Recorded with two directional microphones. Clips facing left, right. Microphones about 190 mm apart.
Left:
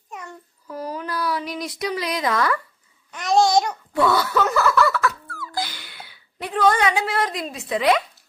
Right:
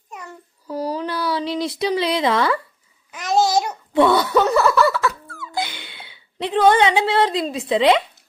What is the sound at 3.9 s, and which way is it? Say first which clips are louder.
Speech: right 4 dB; 25° right (ahead or behind).